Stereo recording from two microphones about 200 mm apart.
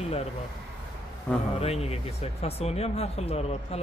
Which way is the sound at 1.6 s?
30° left (ahead or behind).